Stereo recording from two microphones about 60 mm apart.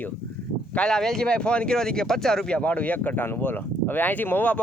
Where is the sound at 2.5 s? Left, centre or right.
Centre.